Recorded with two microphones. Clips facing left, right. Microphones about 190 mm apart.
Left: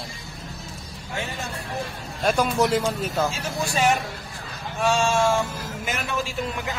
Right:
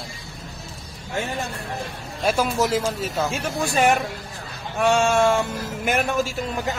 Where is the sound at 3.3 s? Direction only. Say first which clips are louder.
Right 3 dB; 55° right (ahead or behind).